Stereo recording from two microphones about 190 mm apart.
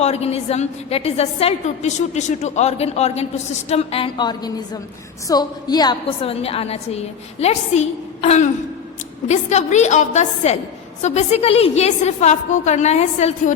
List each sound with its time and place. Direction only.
0.0 s a woman's voice: 35° left (ahead or behind)